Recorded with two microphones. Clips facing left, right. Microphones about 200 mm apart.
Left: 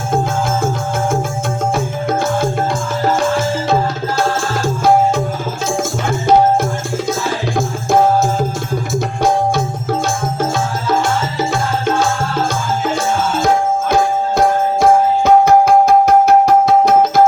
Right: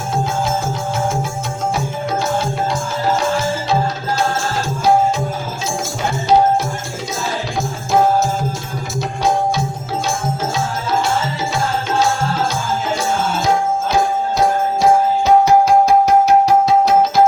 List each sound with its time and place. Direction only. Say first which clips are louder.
1.7 s music: left 3 dB; 50° left (ahead or behind)
14.3 s music: left 3 dB; 50° left (ahead or behind)